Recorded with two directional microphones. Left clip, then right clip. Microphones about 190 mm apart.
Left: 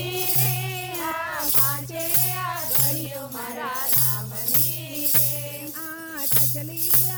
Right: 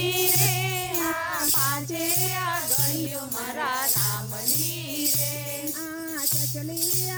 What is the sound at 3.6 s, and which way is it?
Music, 35° right (ahead or behind).